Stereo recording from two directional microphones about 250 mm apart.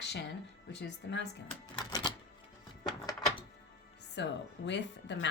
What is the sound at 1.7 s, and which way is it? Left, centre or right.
Typewriter, centre.